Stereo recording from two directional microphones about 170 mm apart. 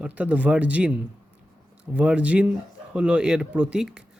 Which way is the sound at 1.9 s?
5° right (ahead or behind).